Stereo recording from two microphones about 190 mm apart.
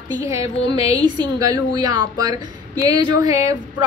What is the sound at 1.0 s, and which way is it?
Speech, 20° right (ahead or behind).